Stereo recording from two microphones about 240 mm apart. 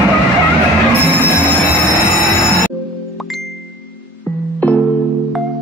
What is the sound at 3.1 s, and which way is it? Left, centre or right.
Music, centre.